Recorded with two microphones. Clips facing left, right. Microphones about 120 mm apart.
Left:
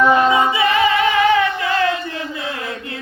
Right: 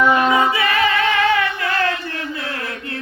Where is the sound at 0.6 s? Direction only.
20° left (ahead or behind).